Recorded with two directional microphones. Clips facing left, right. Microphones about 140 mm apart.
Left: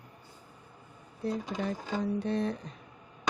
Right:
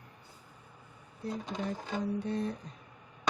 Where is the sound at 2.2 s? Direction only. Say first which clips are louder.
Left 3 dB; 90° left.